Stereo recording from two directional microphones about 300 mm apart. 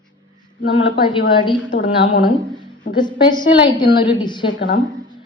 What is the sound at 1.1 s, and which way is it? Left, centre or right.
Speech, centre.